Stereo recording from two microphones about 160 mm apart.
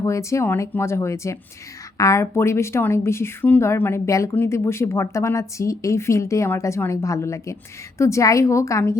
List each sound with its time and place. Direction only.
0.0 s a woman's voice: 20° left (ahead or behind)